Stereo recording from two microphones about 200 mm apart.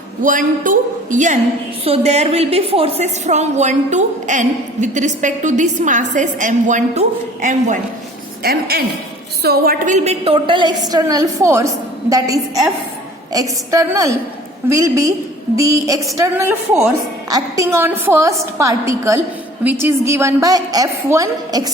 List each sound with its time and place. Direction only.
0.2 s a woman's voice: 40° right (ahead or behind)
8.4 s a woman's voice: 50° right (ahead or behind); by 21.7 s 20° right (ahead or behind)